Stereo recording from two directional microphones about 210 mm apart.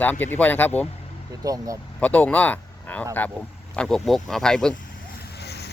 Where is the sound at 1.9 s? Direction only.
5° left (ahead or behind).